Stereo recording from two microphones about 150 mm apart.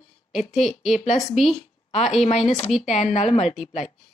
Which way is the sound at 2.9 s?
50° left (ahead or behind).